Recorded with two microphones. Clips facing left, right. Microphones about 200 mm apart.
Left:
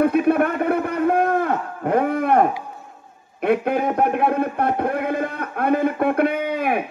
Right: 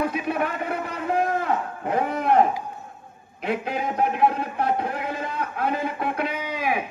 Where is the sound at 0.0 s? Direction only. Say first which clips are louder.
Left 8 dB; 55° left (ahead or behind).